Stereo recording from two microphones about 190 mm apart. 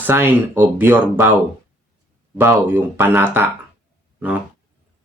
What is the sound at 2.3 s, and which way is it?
Speech, 10° right (ahead or behind).